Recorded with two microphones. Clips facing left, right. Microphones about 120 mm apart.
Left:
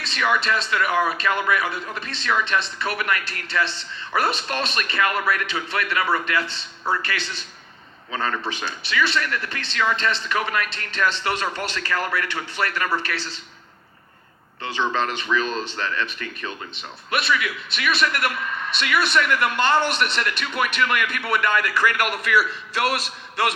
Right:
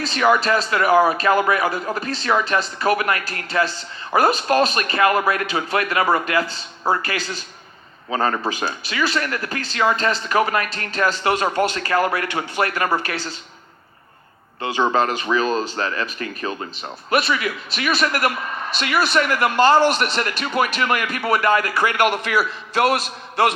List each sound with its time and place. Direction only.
0.0 s a man's voice: 35° right (ahead or behind)
14.8 s a man's voice: 45° right (ahead or behind)
22.7 s a man's voice: 45° right (ahead or behind)